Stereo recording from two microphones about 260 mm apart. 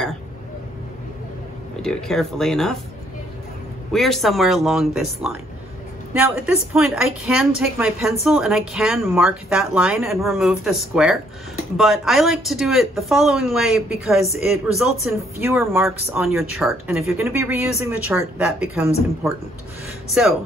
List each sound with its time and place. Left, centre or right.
1.8 s a woman's voice: centre
3.9 s a woman's voice: centre
20.2 s a woman's voice: centre